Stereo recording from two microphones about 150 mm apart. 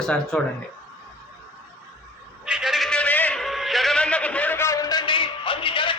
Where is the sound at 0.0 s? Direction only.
5° left (ahead or behind).